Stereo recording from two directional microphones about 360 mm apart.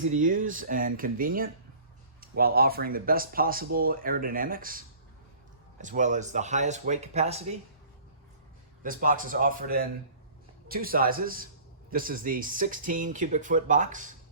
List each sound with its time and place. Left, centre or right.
0.1 s speech: right
5.8 s speech: right
8.8 s speech: right